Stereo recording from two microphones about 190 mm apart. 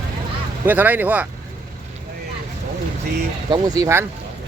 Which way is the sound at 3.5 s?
20° right (ahead or behind).